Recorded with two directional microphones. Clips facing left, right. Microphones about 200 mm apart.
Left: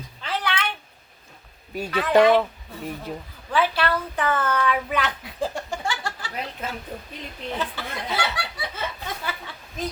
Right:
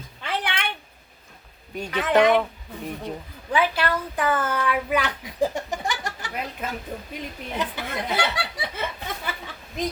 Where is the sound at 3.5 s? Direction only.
15° right (ahead or behind).